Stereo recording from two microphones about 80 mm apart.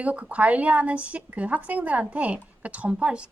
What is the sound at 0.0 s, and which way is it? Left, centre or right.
A woman's voice, centre.